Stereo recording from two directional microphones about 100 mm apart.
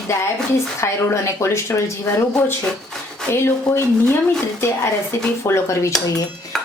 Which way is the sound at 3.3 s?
25° left (ahead or behind).